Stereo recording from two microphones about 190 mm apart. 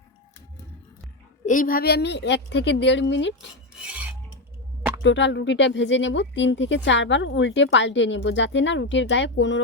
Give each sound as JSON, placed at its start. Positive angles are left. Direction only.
{"t": 1.5, "sound": "speech", "side_deg": 45}
{"t": 3.8, "sound": "filing", "side_deg": -5}
{"t": 5.0, "sound": "speech", "side_deg": 75}